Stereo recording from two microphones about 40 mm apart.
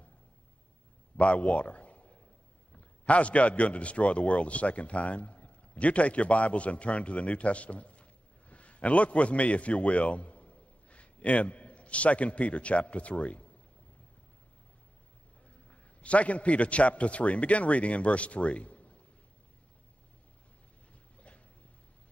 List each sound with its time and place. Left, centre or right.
1.1 s speech: left
3.1 s a man's voice: left
16.0 s a man's voice: left